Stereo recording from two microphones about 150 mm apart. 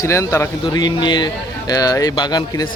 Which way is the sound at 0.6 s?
30° left (ahead or behind).